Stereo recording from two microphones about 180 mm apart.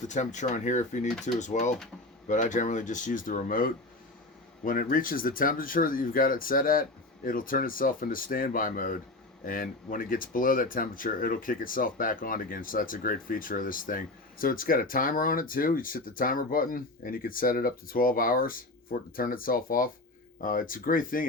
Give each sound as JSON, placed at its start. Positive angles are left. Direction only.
{"t": 0.1, "sound": "speech", "side_deg": 40}